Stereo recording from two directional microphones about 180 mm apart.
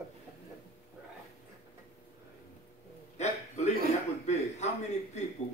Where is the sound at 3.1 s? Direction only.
40° left (ahead or behind).